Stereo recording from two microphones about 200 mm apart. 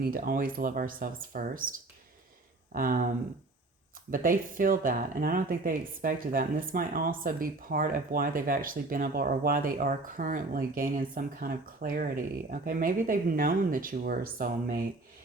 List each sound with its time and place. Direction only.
0.0 s speech: 45° right (ahead or behind)
2.7 s speech: 45° right (ahead or behind)
4.1 s speech: 45° right (ahead or behind)